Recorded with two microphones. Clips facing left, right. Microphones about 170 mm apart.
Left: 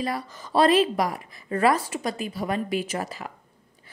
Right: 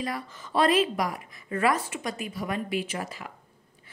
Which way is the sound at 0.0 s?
35° left (ahead or behind).